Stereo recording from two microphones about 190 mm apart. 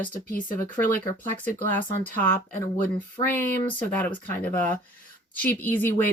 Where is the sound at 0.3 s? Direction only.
45° left (ahead or behind).